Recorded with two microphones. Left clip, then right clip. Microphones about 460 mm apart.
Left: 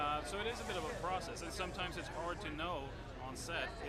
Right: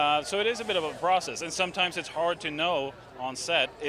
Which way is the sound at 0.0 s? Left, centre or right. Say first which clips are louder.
Right 13 dB; right.